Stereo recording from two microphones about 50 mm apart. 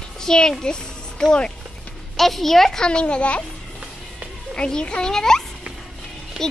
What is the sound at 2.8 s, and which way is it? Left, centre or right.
Speech, centre.